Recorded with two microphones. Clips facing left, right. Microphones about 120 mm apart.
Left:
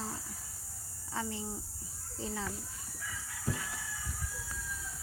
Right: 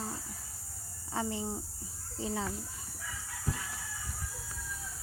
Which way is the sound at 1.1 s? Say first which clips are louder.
Right 4 dB; 20° right (ahead or behind).